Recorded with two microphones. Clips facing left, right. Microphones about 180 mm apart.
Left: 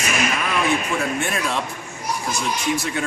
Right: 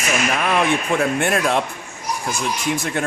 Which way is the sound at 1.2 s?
60° right (ahead or behind).